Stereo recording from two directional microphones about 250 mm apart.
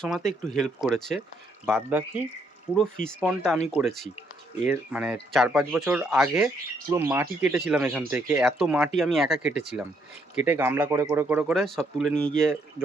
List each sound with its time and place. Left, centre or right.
0.3 s speech: centre